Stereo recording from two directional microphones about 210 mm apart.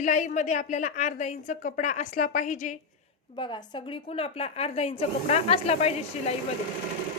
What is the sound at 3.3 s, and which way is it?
A woman's voice, 20° left (ahead or behind).